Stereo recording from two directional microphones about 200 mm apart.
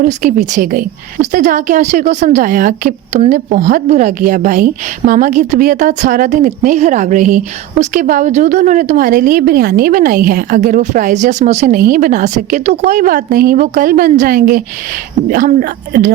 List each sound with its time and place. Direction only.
0.0 s a woman's voice: 40° right (ahead or behind)